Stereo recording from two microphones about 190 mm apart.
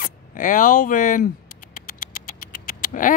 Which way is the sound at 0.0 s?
45° left (ahead or behind).